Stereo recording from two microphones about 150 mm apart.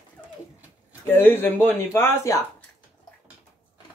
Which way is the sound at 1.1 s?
15° left (ahead or behind).